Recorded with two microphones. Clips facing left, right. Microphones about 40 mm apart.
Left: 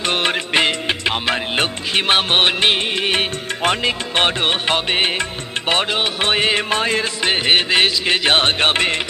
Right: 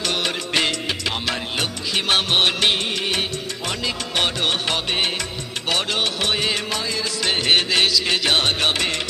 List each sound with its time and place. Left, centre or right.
0.0 s music: left
7.2 s music: left